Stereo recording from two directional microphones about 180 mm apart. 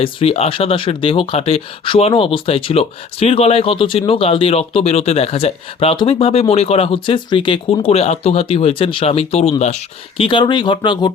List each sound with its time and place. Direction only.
0.0 s speech: 30° left (ahead or behind)
10.2 s speech: 25° left (ahead or behind)